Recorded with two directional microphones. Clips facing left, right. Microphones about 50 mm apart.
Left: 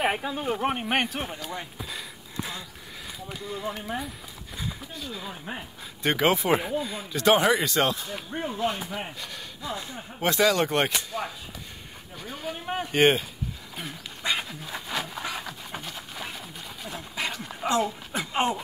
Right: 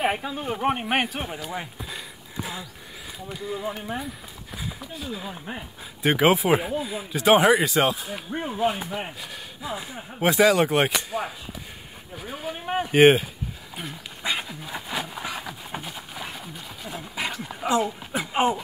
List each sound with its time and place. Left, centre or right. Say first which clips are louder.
0.0 s speech: right 1 dB; centre
0.6 s speech: right 4 dB; centre
13.7 s a sound: right 2 dB; centre